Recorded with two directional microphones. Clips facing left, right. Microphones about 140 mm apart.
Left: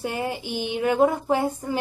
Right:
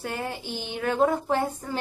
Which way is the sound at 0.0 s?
15° left (ahead or behind).